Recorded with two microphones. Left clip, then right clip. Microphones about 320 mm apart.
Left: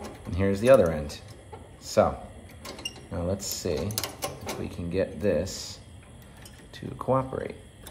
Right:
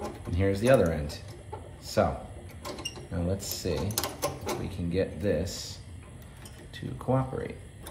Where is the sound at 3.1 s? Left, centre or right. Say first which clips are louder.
Left 3 dB; centre.